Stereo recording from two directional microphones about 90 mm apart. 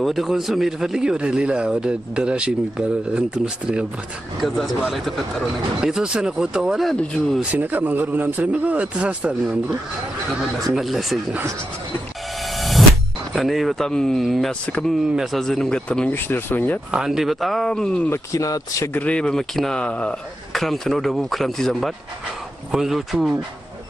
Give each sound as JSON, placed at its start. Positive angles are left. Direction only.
{"t": 0.0, "sound": "speech", "side_deg": 0}
{"t": 7.5, "sound": "speech", "side_deg": -20}
{"t": 10.7, "sound": "speech", "side_deg": 0}
{"t": 12.5, "sound": "music", "side_deg": 0}
{"t": 13.3, "sound": "speech", "side_deg": 0}
{"t": 16.3, "sound": "speech", "side_deg": 25}
{"t": 16.9, "sound": "speech", "side_deg": -5}
{"t": 18.1, "sound": "speech", "side_deg": 40}
{"t": 18.9, "sound": "a man's voice", "side_deg": 15}
{"t": 20.6, "sound": "speech", "side_deg": 0}